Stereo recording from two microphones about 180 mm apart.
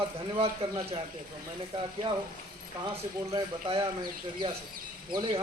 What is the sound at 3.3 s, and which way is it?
Speech, 30° right (ahead or behind).